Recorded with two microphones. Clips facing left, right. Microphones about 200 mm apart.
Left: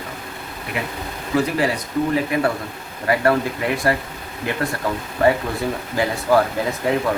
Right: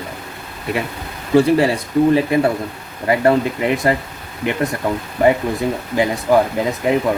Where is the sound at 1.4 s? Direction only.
30° right (ahead or behind).